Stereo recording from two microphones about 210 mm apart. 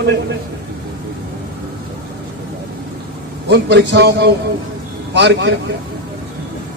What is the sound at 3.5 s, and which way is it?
A man's voice, 55° right (ahead or behind).